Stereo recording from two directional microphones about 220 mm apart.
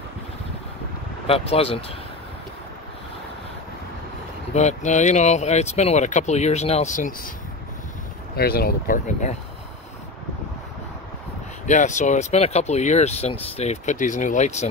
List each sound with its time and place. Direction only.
1.2 s speech: 25° left (ahead or behind)
4.6 s speech: 30° left (ahead or behind)
8.4 s speech: 45° left (ahead or behind)
11.6 s speech: 35° left (ahead or behind)